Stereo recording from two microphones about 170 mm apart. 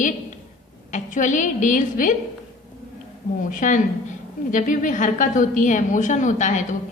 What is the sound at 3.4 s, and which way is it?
A woman's voice, 50° left (ahead or behind).